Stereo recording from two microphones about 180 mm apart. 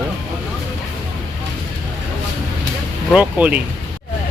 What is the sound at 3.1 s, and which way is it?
Speech, 10° right (ahead or behind).